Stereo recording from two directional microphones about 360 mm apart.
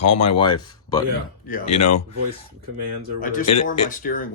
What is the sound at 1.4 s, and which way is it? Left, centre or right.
Speech, left.